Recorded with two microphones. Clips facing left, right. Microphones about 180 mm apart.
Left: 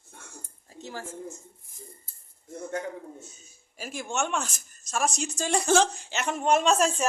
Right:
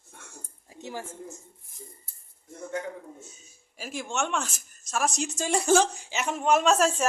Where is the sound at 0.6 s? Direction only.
15° right (ahead or behind).